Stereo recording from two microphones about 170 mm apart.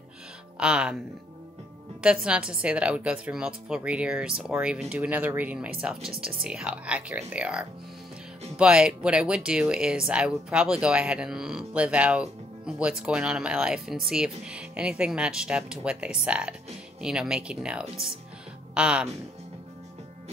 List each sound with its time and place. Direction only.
0.6 s speech: 5° right (ahead or behind)
2.0 s a woman's voice: 5° right (ahead or behind)